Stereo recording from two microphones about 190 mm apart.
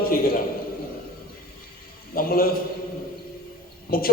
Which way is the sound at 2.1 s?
50° left (ahead or behind).